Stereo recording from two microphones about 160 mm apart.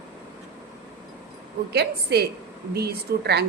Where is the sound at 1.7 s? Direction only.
90° right.